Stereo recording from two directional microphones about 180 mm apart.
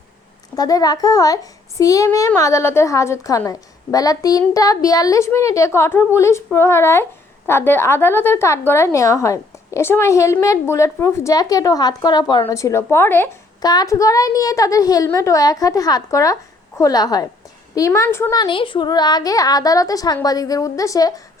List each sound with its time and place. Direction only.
0.5 s a woman's voice: 20° left (ahead or behind)